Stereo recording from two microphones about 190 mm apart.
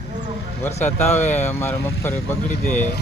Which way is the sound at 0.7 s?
35° left (ahead or behind).